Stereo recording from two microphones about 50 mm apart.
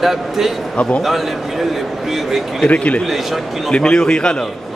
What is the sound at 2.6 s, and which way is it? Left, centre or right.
A man's voice, left.